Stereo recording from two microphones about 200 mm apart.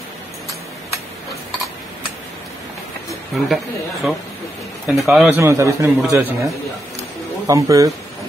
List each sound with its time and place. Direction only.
3.4 s speech: centre (ahead or behind)
5.3 s a man's voice: 15° right (ahead or behind)